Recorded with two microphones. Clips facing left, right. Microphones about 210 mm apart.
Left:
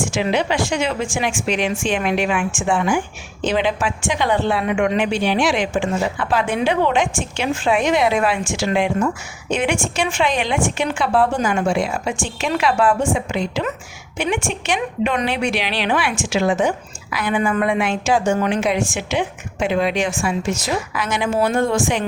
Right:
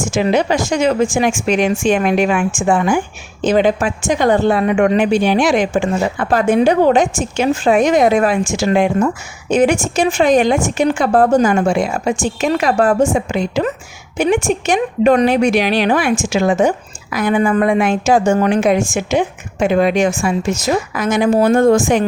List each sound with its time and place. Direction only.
0.1 s a woman's voice: 45° right (ahead or behind)